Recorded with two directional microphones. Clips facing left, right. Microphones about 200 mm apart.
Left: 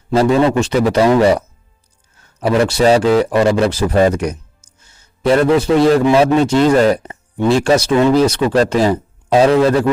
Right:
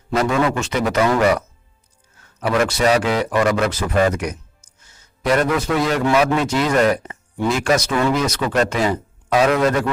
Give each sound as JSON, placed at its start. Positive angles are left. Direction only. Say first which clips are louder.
{"t": 0.1, "sound": "speech", "louder": "left 6 dB", "side_deg": 30}
{"t": 2.4, "sound": "speech", "louder": "left 5 dB", "side_deg": 30}